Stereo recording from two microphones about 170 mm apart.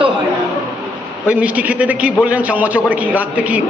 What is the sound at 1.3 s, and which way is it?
A man's voice, 10° right (ahead or behind).